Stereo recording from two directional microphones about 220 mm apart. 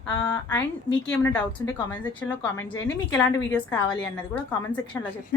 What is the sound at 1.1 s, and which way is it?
Speech, 10° left (ahead or behind).